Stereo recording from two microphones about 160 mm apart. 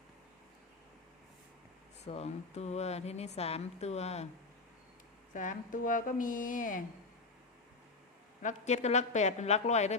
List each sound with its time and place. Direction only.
2.0 s speech: 40° left (ahead or behind)
5.3 s speech: 55° left (ahead or behind)
8.4 s a woman's voice: 50° left (ahead or behind)